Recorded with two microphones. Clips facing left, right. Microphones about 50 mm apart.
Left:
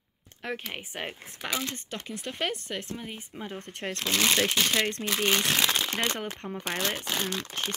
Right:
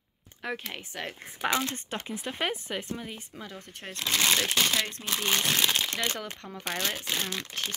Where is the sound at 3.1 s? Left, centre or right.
Left.